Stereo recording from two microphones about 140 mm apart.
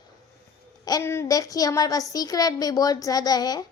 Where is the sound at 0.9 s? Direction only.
20° left (ahead or behind).